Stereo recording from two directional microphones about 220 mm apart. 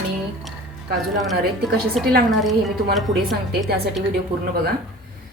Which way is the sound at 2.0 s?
Centre (ahead or behind).